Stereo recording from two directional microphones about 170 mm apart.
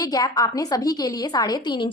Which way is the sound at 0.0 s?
20° left (ahead or behind).